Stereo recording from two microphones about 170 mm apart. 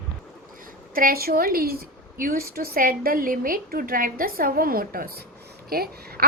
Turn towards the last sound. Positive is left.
turn(degrees=-65)  # may be behind; listen again after turning